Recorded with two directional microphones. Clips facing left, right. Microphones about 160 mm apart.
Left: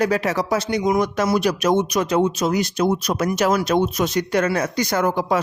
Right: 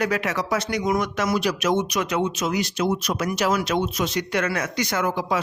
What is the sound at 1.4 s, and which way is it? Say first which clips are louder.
Speech: left 4 dB; 45° left (ahead or behind).